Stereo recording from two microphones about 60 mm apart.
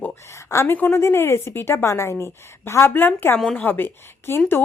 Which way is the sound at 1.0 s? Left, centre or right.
Left.